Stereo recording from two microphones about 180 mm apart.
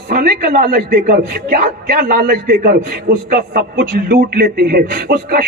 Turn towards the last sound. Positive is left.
turn(degrees=-55)  # may be behind; listen again after turning